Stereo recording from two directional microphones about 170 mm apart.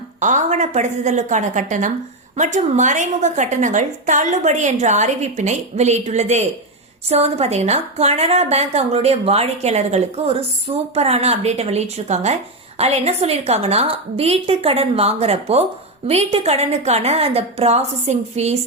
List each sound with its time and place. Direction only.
0.2 s a woman's voice: 45° right (ahead or behind)